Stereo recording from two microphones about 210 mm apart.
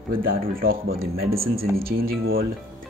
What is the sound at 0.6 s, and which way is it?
Speech, 45° right (ahead or behind).